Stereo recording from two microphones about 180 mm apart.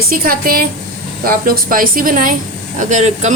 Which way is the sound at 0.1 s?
55° right (ahead or behind).